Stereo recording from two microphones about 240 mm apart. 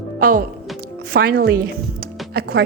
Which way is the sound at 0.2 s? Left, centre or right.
Right.